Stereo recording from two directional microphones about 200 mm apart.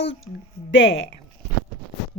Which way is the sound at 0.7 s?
60° left (ahead or behind).